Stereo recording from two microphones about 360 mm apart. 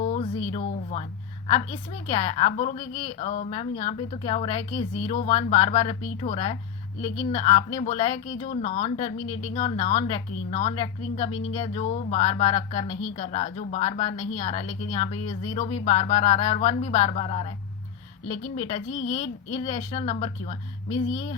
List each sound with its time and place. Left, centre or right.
0.0 s a sound: centre
1.5 s speech: centre
18.5 s speech: centre